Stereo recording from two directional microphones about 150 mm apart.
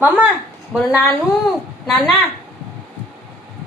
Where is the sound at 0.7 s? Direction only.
Centre (ahead or behind).